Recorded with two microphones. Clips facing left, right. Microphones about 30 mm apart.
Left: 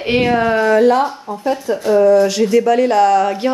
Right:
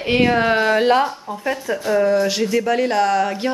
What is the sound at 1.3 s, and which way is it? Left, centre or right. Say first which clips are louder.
Speech: left 3 dB; right.